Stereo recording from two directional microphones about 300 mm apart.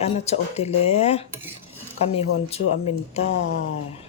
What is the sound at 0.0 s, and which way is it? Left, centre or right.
Speech, left.